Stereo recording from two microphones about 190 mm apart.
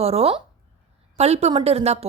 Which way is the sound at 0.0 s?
30° right (ahead or behind).